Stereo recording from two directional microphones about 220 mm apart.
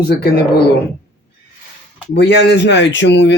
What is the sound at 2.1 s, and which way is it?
Speech, 50° left (ahead or behind).